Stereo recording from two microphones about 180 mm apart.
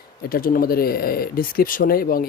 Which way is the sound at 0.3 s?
55° left (ahead or behind).